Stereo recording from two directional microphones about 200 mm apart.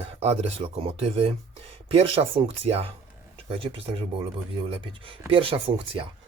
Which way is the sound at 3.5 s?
25° right (ahead or behind).